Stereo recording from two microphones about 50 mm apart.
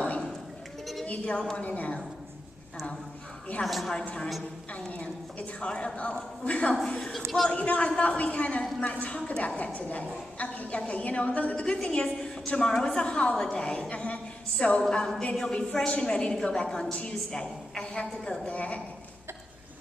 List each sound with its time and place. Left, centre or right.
1.0 s a woman's voice: left
3.6 s a woman's voice: centre
4.0 s a woman's voice: centre
6.9 s a woman's voice: centre
7.5 s a woman's voice: left
14.8 s a woman's voice: centre
18.5 s a woman's voice: left